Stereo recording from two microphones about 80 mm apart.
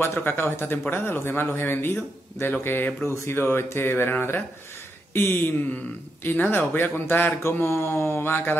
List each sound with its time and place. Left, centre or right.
0.0 s speech: left
7.9 s mantra: left